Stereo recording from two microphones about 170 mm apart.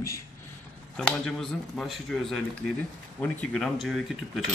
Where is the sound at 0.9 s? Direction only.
5° left (ahead or behind).